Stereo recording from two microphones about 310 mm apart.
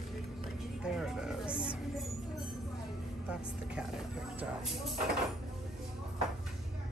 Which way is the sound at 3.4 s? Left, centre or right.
Centre.